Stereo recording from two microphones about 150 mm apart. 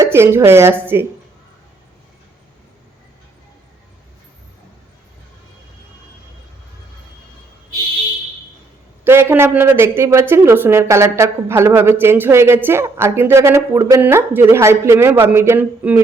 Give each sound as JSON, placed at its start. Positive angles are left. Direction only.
{"t": 0.0, "sound": "speech", "side_deg": -15}
{"t": 9.0, "sound": "speech", "side_deg": -15}